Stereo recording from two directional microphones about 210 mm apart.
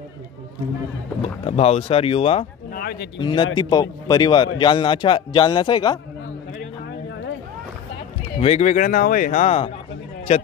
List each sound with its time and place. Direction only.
1.2 s a man's voice: 30° left (ahead or behind)
2.7 s a sound: 45° left (ahead or behind)
3.2 s a man's voice: 25° left (ahead or behind)
8.4 s speech: 30° left (ahead or behind)